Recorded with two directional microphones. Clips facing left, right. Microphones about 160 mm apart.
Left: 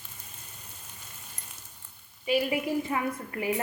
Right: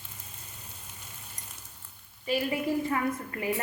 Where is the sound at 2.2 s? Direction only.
15° left (ahead or behind).